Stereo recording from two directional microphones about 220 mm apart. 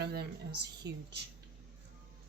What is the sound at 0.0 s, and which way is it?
Speech, 45° right (ahead or behind).